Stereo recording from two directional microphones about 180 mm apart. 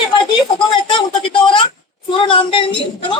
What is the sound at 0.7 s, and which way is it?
Speech, 25° left (ahead or behind).